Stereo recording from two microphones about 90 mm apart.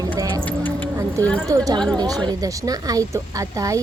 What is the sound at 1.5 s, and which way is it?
Speech, 35° right (ahead or behind).